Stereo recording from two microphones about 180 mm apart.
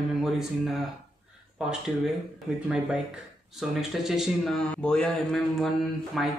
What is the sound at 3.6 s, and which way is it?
A man's voice, centre (ahead or behind).